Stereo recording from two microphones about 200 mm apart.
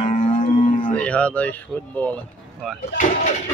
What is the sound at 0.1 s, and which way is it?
Livestock, 40° left (ahead or behind).